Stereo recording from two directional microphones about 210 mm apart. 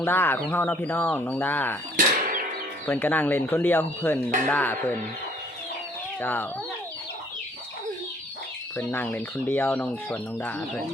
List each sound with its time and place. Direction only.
0.0 s speech: 10° left (ahead or behind)
2.0 s a sound: 40° right (ahead or behind)
2.8 s speech: 10° left (ahead or behind)
6.1 s speech: 10° left (ahead or behind)
8.7 s speech: 10° left (ahead or behind)